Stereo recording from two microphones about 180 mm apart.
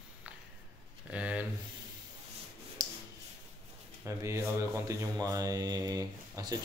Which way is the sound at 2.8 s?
20° right (ahead or behind).